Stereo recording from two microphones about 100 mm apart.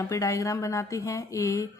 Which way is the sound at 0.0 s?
35° left (ahead or behind).